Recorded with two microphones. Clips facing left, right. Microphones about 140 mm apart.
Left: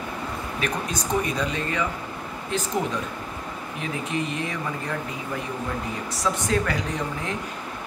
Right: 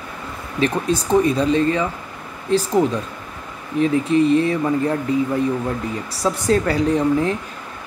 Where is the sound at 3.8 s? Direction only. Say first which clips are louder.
Right 13 dB; 35° right (ahead or behind).